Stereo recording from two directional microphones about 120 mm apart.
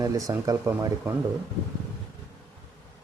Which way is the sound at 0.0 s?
25° right (ahead or behind).